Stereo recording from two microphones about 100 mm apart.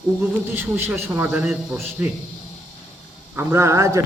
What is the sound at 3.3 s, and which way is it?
Speech, 25° right (ahead or behind).